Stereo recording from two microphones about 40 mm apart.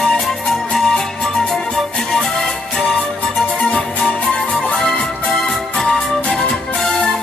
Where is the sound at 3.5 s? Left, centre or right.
Left.